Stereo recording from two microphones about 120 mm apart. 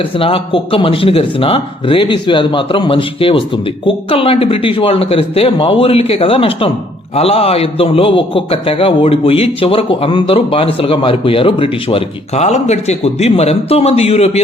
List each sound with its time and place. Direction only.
0.2 s a man's voice: 50° left (ahead or behind)